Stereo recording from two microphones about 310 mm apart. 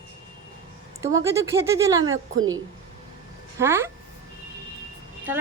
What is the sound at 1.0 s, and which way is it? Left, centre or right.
Speech, centre.